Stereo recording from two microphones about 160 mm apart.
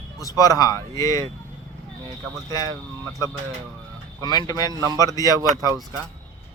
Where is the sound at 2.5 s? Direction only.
20° left (ahead or behind).